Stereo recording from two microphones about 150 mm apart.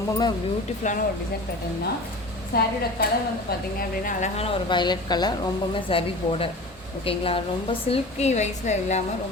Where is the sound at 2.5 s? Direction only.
90° left.